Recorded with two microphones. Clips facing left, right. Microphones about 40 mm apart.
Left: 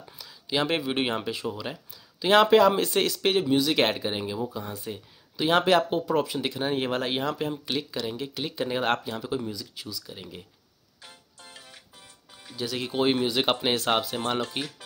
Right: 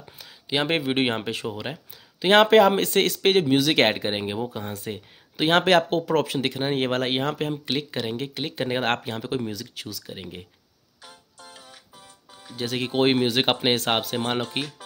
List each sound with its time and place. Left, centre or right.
0.0 s speech: right
6.5 s speech: right
9.5 s speech: right
10.0 s speech: right
12.5 s speech: right